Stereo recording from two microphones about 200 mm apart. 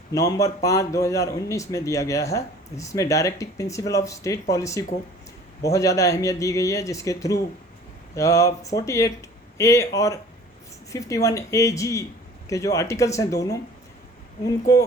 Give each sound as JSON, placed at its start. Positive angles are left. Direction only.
{"t": 0.1, "sound": "a man's voice", "side_deg": 15}